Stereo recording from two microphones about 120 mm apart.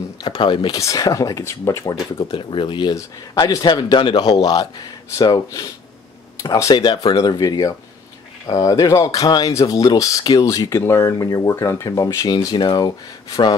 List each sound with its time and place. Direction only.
0.2 s a man's voice: 40° left (ahead or behind)
0.7 s speech: 30° left (ahead or behind)
2.2 s speech: 45° left (ahead or behind)
3.0 s a man's voice: 30° left (ahead or behind)
12.4 s a man's voice: 40° left (ahead or behind)